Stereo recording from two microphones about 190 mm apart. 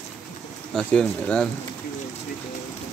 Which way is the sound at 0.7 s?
5° left (ahead or behind).